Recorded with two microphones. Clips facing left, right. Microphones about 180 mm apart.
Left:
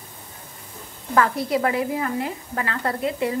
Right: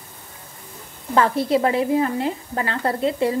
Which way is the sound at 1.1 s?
30° right (ahead or behind).